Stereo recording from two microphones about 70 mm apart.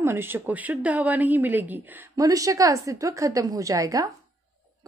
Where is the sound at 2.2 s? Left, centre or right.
Right.